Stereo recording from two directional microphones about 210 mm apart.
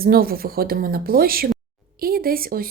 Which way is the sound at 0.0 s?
45° right (ahead or behind).